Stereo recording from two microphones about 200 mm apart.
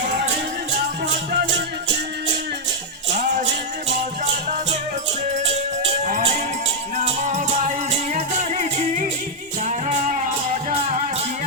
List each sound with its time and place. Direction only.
3.1 s music: 40° right (ahead or behind)
4.4 s music: 40° right (ahead or behind)
9.6 s music: 35° right (ahead or behind)